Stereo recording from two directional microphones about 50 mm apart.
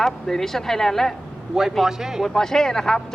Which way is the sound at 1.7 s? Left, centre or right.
Centre.